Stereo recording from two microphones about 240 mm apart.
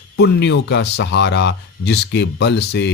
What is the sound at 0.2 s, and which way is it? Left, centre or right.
Speech, left.